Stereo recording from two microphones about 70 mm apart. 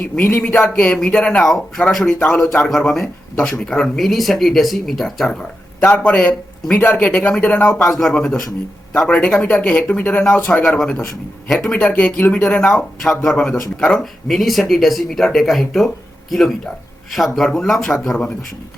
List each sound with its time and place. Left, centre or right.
0.2 s speech: left
0.4 s speech: centre
2.2 s speech: centre
2.6 s speech: centre
3.3 s speech: centre
7.7 s speech: centre
8.9 s speech: centre
10.7 s speech: centre
11.7 s speech: centre
13.0 s speech: centre
13.3 s speech: centre